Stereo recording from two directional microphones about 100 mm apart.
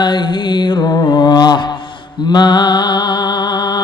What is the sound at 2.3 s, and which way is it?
Music, 45° left (ahead or behind).